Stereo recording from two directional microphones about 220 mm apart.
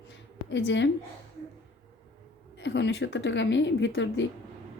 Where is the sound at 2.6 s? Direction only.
55° left (ahead or behind).